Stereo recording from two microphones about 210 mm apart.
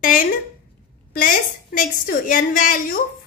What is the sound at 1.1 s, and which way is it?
A woman's voice, 40° left (ahead or behind).